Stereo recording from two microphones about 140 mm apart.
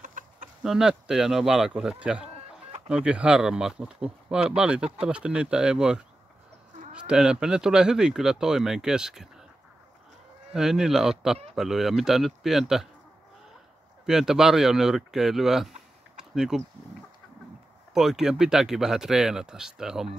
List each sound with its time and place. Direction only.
0.0 s chicken: 70° right (ahead or behind)
0.6 s speech: 5° right (ahead or behind)
10.5 s speech: 5° right (ahead or behind)
14.0 s speech: 5° right (ahead or behind)
16.2 s a sound: 5° right (ahead or behind)
17.9 s speech: 5° right (ahead or behind)